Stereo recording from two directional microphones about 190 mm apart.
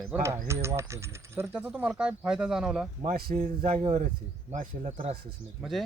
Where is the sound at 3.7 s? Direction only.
30° right (ahead or behind).